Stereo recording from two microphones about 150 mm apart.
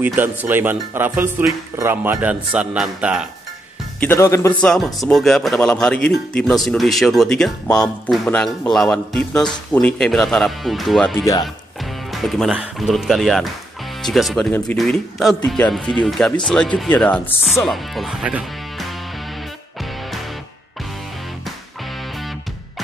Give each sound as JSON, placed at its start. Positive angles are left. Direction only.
{"t": 0.0, "sound": "speech", "side_deg": -10}
{"t": 4.0, "sound": "speech", "side_deg": 15}
{"t": 4.6, "sound": "a man's voice", "side_deg": 5}